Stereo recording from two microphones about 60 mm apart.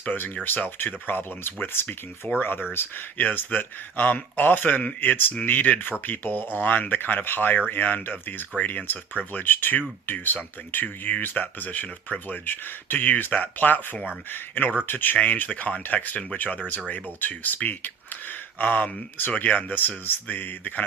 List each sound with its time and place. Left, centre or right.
0.0 s speech: left